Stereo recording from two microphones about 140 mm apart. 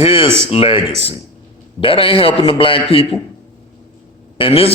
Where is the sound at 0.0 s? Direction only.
40° left (ahead or behind).